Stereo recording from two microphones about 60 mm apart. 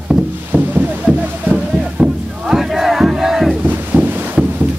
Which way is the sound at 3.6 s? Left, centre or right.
Right.